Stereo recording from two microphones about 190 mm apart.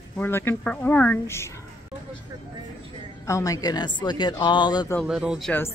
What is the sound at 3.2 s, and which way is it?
A woman's voice, 15° left (ahead or behind).